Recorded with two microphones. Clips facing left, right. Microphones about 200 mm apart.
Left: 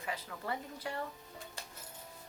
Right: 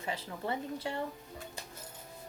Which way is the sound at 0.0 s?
25° right (ahead or behind).